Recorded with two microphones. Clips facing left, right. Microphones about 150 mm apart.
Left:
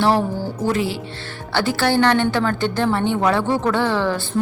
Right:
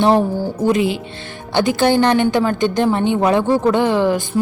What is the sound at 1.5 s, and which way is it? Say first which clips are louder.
A woman's voice: right 4 dB; 20° right (ahead or behind).